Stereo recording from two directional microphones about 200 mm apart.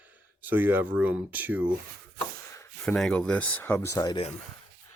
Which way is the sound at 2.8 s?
5° left (ahead or behind).